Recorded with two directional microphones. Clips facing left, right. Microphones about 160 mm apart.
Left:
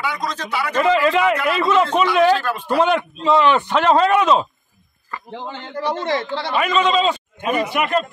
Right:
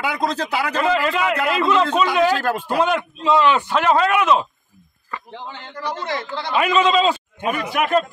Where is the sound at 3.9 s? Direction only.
30° left (ahead or behind).